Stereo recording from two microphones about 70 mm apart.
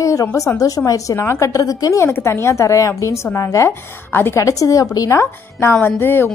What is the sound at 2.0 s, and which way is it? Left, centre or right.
A woman's voice, left.